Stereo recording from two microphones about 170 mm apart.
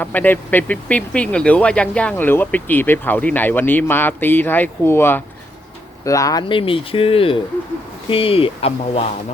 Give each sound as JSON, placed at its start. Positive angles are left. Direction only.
{"t": 0.0, "sound": "speech", "side_deg": 10}